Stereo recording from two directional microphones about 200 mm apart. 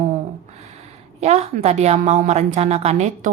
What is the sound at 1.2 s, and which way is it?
A woman's voice, 30° right (ahead or behind).